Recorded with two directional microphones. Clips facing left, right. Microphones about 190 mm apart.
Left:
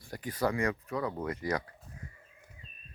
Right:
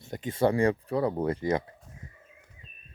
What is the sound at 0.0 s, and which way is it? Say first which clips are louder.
Speech: right 6 dB; 25° right (ahead or behind).